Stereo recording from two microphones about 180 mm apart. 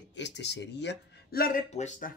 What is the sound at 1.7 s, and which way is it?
Speech, 40° left (ahead or behind).